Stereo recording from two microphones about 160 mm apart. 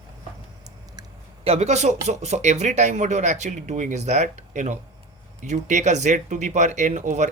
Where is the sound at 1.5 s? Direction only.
40° right (ahead or behind).